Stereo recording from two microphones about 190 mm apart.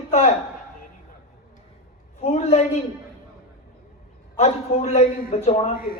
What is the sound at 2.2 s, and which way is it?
Speech, 35° left (ahead or behind).